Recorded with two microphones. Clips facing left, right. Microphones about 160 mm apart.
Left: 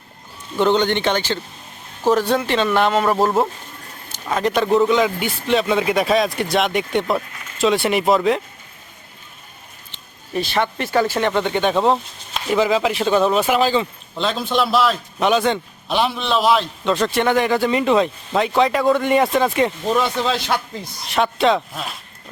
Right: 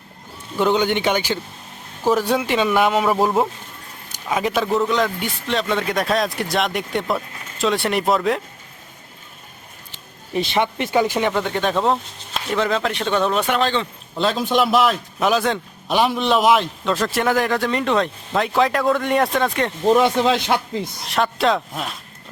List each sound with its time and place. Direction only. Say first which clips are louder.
0.5 s speech: left 1 dB; 5° right (ahead or behind)
9.9 s speech: right 1 dB; 20° right (ahead or behind)
11.3 s speech: left 2 dB; centre (ahead or behind)
14.2 s speech: right 2 dB; 10° right (ahead or behind)
15.2 s speech: left 2 dB; centre (ahead or behind)
15.9 s speech: right 2 dB; 10° right (ahead or behind)
16.8 s speech: left 2 dB; centre (ahead or behind)
19.8 s speech: right 4 dB; 20° right (ahead or behind)
21.1 s speech: left 2 dB; centre (ahead or behind)